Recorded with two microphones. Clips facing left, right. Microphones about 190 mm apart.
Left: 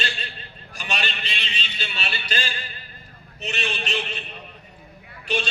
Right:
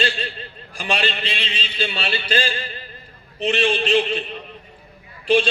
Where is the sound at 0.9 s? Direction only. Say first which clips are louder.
Right 5 dB; 55° right (ahead or behind).